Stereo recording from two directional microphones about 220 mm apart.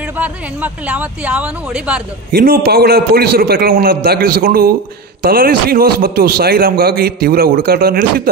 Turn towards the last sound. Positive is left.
turn(degrees=-45)  # may be behind; listen again after turning